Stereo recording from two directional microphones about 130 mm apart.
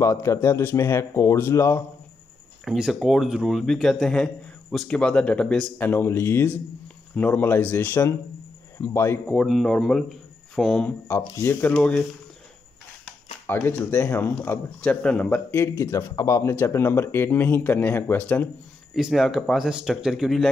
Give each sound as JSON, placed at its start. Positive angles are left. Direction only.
{"t": 0.0, "sound": "speech", "side_deg": 20}
{"t": 2.6, "sound": "speech", "side_deg": -5}
{"t": 9.3, "sound": "speech", "side_deg": 0}
{"t": 13.5, "sound": "speech", "side_deg": 15}
{"t": 18.9, "sound": "speech", "side_deg": 0}